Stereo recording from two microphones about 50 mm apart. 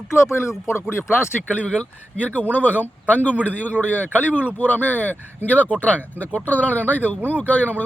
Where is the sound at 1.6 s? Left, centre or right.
Left.